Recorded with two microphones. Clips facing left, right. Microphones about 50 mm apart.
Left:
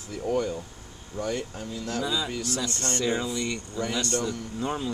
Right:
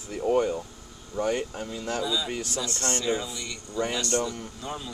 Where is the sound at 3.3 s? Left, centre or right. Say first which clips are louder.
Left 7 dB; left.